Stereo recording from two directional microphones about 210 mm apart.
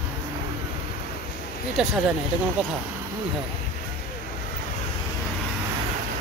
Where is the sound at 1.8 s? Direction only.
5° right (ahead or behind).